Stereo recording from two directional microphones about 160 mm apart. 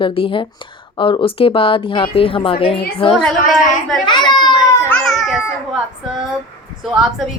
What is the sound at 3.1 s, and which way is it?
Speech, 5° left (ahead or behind).